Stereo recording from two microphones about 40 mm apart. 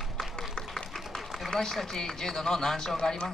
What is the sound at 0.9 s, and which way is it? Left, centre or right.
Run, centre.